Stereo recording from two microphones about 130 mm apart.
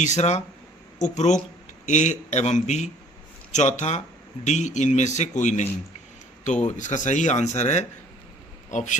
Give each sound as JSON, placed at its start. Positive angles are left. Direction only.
{"t": 0.0, "sound": "a man's voice", "side_deg": 65}
{"t": 6.7, "sound": "a man's voice", "side_deg": 70}